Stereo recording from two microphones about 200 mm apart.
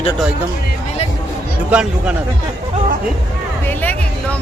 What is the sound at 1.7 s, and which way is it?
Speech, 5° right (ahead or behind).